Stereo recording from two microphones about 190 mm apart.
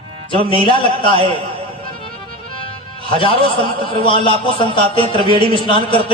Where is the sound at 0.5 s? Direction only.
25° left (ahead or behind).